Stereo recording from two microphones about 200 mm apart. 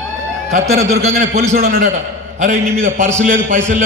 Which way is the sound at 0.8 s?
35° right (ahead or behind).